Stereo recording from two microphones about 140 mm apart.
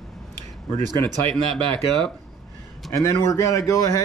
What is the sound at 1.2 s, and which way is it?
Speech, 5° left (ahead or behind).